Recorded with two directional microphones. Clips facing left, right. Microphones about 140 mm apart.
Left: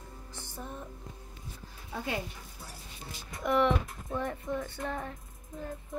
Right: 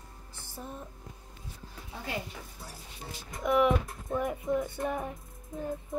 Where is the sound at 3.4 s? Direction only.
5° right (ahead or behind).